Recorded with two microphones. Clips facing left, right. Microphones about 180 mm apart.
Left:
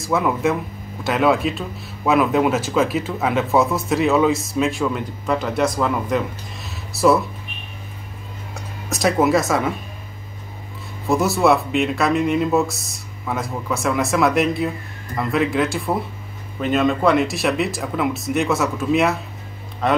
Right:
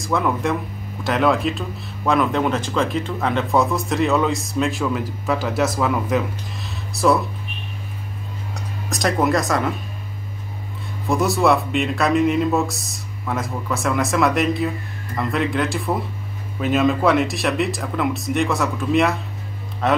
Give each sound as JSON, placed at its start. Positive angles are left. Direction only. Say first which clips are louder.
{"t": 0.0, "sound": "speech", "louder": "left 2 dB", "side_deg": 5}
{"t": 8.5, "sound": "speech", "louder": "left 1 dB", "side_deg": 0}
{"t": 11.1, "sound": "speech", "louder": "left 1 dB", "side_deg": 0}